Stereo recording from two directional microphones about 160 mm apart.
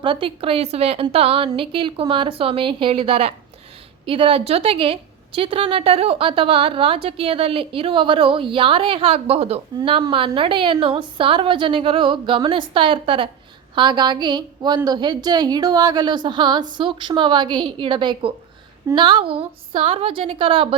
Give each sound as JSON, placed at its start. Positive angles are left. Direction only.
{"t": 0.0, "sound": "a woman's voice", "side_deg": -30}